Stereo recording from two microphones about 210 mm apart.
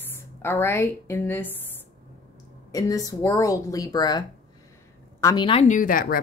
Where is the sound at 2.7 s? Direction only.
15° left (ahead or behind).